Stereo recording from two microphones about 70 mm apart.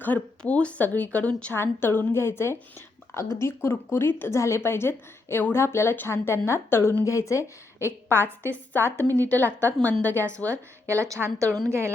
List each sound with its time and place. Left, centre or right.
0.0 s speech: left
1.5 s a woman's voice: left
7.0 s a woman's voice: left
10.5 s speech: right